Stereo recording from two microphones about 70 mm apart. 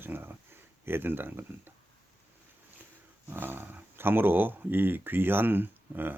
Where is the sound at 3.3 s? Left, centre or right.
Right.